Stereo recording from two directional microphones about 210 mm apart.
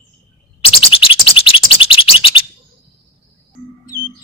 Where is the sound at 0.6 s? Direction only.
25° left (ahead or behind).